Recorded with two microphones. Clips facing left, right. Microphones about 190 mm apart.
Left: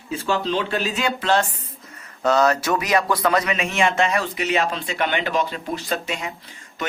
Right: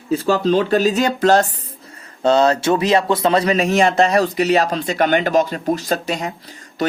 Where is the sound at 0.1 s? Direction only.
40° right (ahead or behind).